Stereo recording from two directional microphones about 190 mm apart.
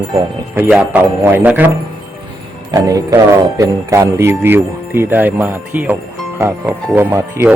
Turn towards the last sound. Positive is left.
turn(degrees=-10)  # may be behind; listen again after turning